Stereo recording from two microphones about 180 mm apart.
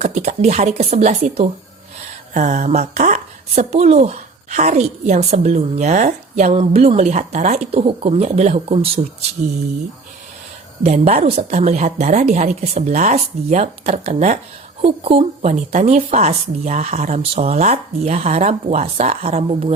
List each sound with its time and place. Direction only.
0.0 s speech: 40° right (ahead or behind)
10.8 s speech: 35° right (ahead or behind)